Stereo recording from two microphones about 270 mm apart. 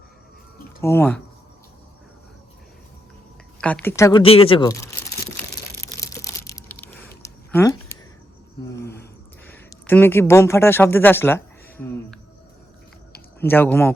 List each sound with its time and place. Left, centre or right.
0.8 s speech: centre
3.6 s crumpling: centre
8.7 s a sound: left
9.5 s speech: centre
13.4 s speech: centre